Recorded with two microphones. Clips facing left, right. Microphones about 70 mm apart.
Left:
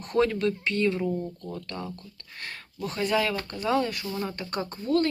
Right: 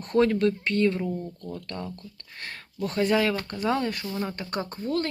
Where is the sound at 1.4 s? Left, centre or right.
Left.